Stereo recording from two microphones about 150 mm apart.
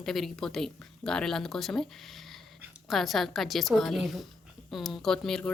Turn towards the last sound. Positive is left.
turn(degrees=5)  # may be behind; listen again after turning